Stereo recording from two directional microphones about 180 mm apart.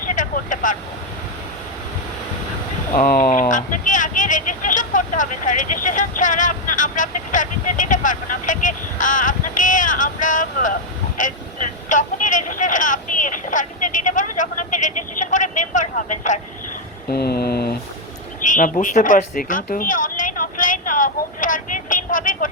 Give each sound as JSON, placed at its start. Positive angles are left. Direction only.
{"t": 0.0, "sound": "vehicle", "side_deg": 45}
{"t": 2.9, "sound": "speech", "side_deg": 50}
{"t": 11.2, "sound": "vehicle", "side_deg": 45}
{"t": 17.1, "sound": "mantra", "side_deg": 60}
{"t": 18.4, "sound": "speech", "side_deg": 45}
{"t": 19.4, "sound": "a sound", "side_deg": 50}